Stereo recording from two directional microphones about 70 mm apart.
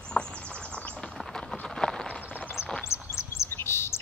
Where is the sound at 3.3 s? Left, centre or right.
Left.